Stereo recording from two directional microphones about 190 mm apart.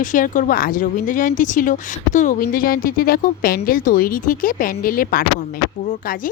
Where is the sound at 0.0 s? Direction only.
40° left (ahead or behind).